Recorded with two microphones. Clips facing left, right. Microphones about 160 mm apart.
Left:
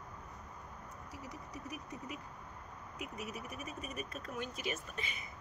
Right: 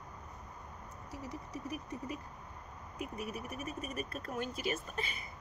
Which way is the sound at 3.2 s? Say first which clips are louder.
Right 3 dB; 5° left (ahead or behind).